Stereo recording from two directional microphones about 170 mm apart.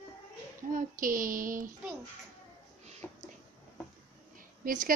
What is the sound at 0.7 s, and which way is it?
Speech, 55° right (ahead or behind).